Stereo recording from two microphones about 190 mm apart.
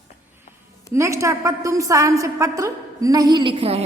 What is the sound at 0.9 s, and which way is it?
A woman's voice, 15° right (ahead or behind).